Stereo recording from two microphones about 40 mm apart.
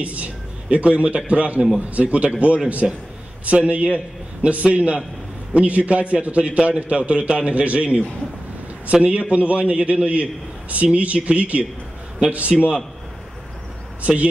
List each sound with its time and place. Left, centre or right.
0.0 s a man's voice: right
14.0 s a man's voice: right